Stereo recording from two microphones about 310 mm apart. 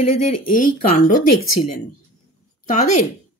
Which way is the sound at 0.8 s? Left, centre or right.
Left.